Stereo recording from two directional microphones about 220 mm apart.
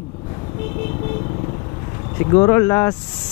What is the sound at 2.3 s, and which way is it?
Speech, 15° left (ahead or behind).